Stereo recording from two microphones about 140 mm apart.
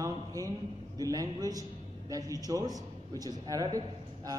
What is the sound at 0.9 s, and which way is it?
A man's voice, 25° right (ahead or behind).